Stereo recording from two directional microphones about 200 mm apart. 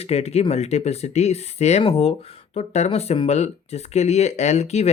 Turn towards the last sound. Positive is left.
turn(degrees=35)  # may be behind; listen again after turning